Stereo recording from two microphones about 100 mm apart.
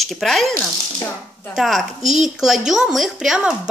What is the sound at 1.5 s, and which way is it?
Speech, centre (ahead or behind).